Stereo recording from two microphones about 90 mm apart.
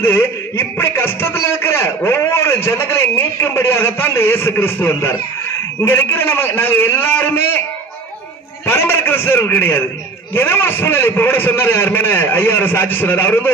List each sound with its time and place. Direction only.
0.0 s speech: 25° left (ahead or behind)
8.6 s speech: 25° left (ahead or behind)